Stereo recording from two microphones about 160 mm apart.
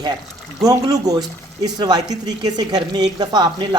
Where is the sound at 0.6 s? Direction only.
25° right (ahead or behind).